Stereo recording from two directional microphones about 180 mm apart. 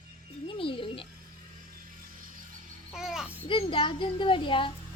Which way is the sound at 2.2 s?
50° right (ahead or behind).